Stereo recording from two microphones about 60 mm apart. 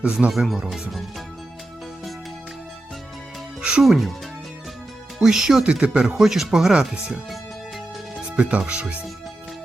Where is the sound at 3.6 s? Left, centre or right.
Centre.